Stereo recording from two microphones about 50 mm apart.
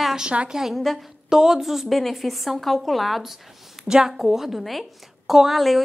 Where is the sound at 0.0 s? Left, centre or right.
Centre.